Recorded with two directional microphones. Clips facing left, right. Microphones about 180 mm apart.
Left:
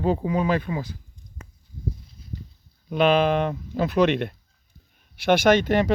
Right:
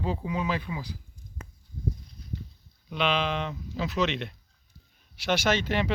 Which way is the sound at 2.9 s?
50° left (ahead or behind).